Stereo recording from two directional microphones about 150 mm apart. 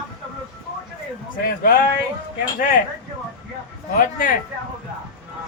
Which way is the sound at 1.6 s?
70° left (ahead or behind).